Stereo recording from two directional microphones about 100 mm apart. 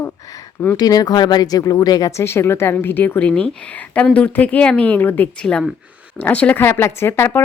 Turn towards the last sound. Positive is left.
turn(degrees=25)  # may be behind; listen again after turning